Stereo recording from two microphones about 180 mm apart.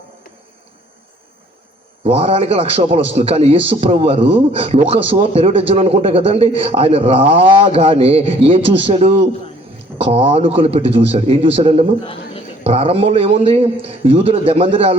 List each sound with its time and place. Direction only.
2.0 s a man's voice: 35° right (ahead or behind)